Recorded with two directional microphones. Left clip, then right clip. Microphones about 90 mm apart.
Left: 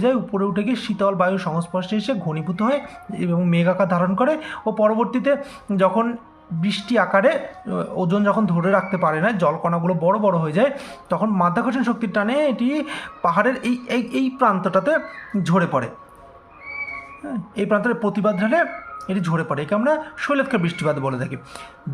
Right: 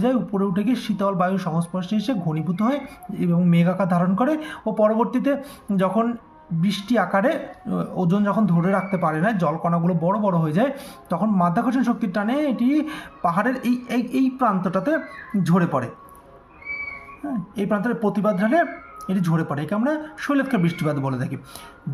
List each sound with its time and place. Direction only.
0.0 s speech: 25° right (ahead or behind)
17.2 s speech: 15° right (ahead or behind)